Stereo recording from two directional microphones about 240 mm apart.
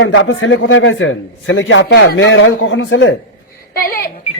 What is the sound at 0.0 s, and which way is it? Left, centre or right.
A man's voice, left.